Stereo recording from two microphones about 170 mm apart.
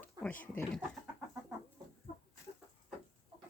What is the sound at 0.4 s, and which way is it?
Speech, 15° left (ahead or behind).